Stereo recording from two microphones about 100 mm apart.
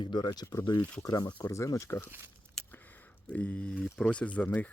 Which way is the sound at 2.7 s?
20° left (ahead or behind).